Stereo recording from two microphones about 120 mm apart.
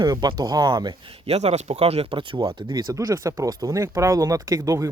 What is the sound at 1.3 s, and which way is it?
Speech, 60° right (ahead or behind).